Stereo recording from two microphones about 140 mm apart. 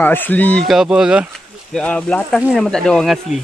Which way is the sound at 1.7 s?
5° left (ahead or behind).